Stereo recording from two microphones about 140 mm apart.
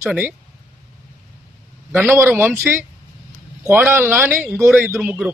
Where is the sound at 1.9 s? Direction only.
15° right (ahead or behind).